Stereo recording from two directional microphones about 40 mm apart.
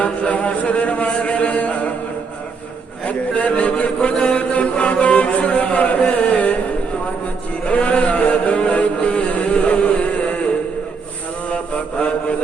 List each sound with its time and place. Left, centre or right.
0.0 s chant: left
3.0 s chant: left
7.6 s music: left
11.5 s mantra: left